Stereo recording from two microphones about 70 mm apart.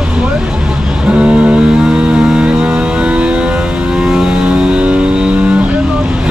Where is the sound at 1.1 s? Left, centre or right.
Centre.